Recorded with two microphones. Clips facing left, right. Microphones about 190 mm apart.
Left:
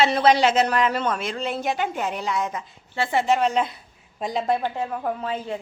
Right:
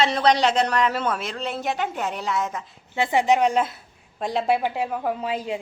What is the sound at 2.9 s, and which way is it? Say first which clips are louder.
A woman's voice: right 2 dB; 15° right (ahead or behind).